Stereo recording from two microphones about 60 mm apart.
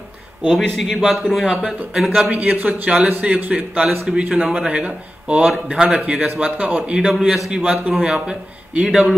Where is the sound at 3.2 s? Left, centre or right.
Centre.